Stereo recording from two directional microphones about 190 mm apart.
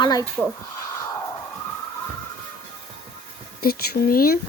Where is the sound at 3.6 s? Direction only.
50° left (ahead or behind).